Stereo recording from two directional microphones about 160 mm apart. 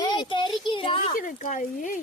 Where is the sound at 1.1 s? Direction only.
55° left (ahead or behind).